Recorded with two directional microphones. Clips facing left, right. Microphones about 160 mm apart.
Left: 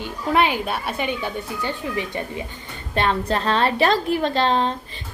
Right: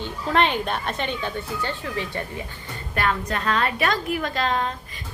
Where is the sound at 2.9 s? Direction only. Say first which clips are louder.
Left 4 dB; 25° left (ahead or behind).